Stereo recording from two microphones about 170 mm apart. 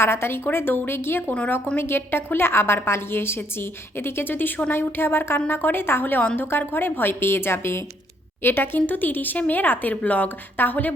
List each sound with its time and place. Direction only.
0.0 s a woman's voice: 15° left (ahead or behind)